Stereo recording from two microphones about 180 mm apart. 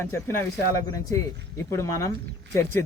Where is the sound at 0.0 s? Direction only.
15° left (ahead or behind).